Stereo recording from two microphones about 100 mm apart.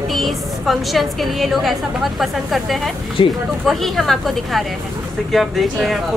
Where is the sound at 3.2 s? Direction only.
55° left (ahead or behind).